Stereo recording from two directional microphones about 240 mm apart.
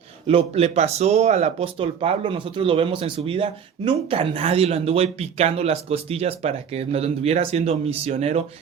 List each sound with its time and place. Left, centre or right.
0.3 s speech: right